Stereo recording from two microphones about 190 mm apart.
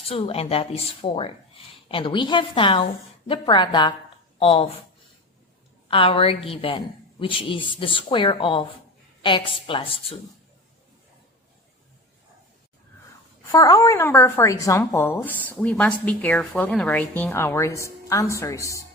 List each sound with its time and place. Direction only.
0.1 s a woman's voice: 30° left (ahead or behind)
5.9 s a woman's voice: 30° left (ahead or behind)
13.5 s a woman's voice: 20° left (ahead or behind)